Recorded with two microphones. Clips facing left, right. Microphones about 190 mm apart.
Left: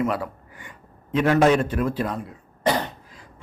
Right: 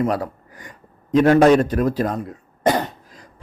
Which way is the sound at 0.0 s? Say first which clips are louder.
Right 3 dB; 40° right (ahead or behind).